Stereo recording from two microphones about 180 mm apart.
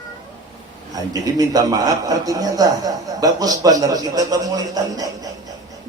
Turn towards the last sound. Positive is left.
turn(degrees=-20)  # may be behind; listen again after turning